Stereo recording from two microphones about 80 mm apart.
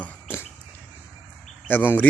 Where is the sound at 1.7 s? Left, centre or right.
Left.